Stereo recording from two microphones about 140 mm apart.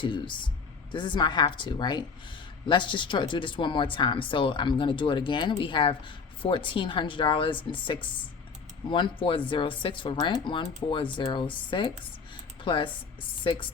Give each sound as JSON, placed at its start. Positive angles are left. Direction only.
{"t": 0.0, "sound": "speech", "side_deg": 35}